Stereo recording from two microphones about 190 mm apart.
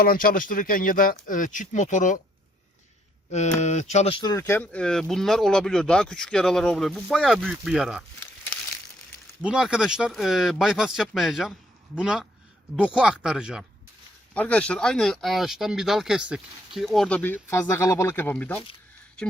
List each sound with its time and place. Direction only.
0.0 s speech: 50° left (ahead or behind)
3.3 s speech: 40° left (ahead or behind)
4.2 s speech: 15° left (ahead or behind); by 8.0 s 5° right (ahead or behind)
9.4 s speech: 5° right (ahead or behind)
14.3 s speech: 5° left (ahead or behind)